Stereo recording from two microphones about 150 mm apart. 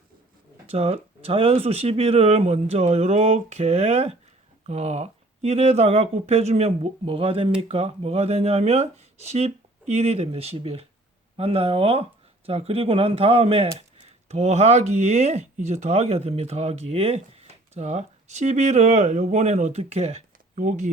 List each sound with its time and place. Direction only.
0.7 s speech: 40° right (ahead or behind)